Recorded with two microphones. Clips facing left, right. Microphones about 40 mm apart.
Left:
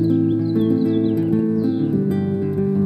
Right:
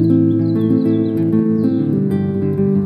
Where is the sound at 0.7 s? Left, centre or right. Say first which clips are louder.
Right 3 dB; centre.